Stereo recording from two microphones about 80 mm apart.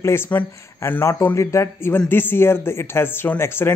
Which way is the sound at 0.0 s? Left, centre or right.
Left.